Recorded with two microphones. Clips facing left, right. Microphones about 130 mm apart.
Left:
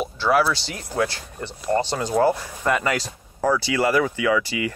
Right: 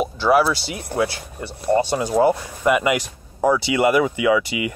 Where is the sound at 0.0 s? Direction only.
15° right (ahead or behind).